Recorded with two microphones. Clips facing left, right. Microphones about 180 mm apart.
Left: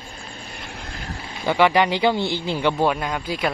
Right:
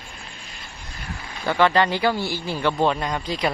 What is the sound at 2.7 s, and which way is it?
Speech, 5° left (ahead or behind).